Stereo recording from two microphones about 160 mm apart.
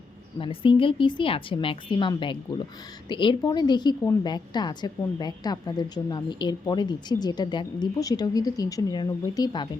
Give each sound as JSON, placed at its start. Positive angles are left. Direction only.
{"t": 0.3, "sound": "a woman's voice", "side_deg": 35}